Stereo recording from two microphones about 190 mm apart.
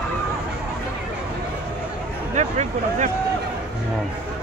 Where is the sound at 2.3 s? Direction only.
40° right (ahead or behind).